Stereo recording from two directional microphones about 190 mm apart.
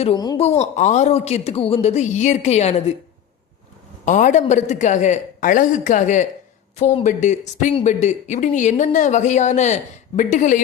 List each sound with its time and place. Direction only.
0.2 s speech: 20° left (ahead or behind)
0.6 s speech: 40° left (ahead or behind)
4.0 s speech: 40° left (ahead or behind)